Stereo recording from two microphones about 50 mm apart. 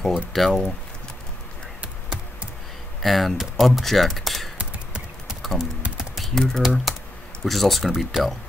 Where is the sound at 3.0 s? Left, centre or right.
Centre.